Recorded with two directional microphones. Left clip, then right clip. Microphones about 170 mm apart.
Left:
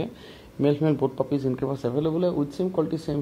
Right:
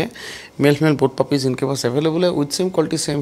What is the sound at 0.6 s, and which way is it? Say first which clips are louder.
Speech: right 7 dB; 60° right (ahead or behind).